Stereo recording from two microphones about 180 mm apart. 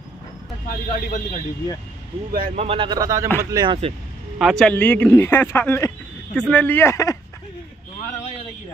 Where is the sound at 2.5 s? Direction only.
30° right (ahead or behind).